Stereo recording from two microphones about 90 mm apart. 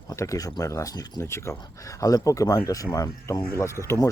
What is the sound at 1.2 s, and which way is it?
Speech, 30° left (ahead or behind).